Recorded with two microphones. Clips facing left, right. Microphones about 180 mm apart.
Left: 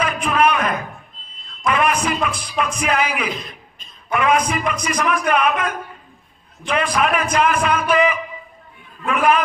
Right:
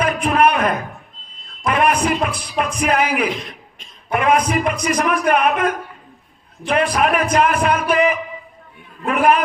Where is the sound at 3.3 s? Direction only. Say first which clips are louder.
Right 2 dB; 90° right.